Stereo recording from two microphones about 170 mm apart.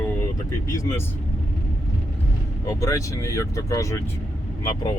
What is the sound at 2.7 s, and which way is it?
Speech, 20° left (ahead or behind).